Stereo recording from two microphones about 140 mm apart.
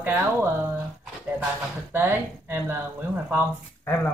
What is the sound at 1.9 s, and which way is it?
Speech, 15° right (ahead or behind).